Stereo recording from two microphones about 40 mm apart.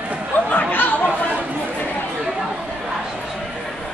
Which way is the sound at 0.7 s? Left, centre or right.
Left.